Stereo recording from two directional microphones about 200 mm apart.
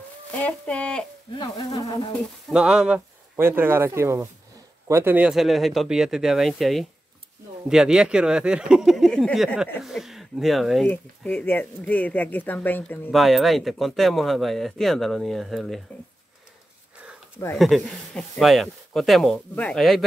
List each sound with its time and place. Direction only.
0.3 s speech: 5° left (ahead or behind)
1.4 s insect: 20° left (ahead or behind)
2.5 s speech: 5° right (ahead or behind)
17.6 s speech: centre (ahead or behind)